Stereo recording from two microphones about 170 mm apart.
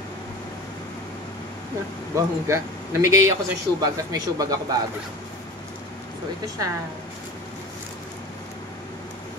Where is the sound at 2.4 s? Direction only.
15° right (ahead or behind).